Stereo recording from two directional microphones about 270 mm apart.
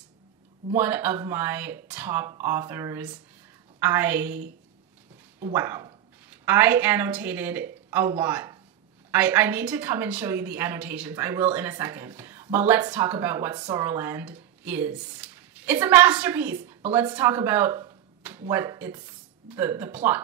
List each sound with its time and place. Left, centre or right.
0.7 s a woman's voice: centre
5.4 s a woman's voice: centre